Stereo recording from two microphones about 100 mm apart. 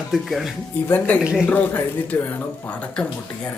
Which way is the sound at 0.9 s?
20° left (ahead or behind).